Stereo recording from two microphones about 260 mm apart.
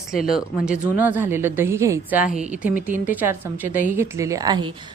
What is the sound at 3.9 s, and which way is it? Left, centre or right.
Speech, centre.